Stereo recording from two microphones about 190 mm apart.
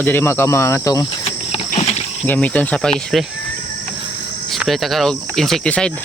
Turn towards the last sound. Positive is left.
turn(degrees=5)  # may be behind; listen again after turning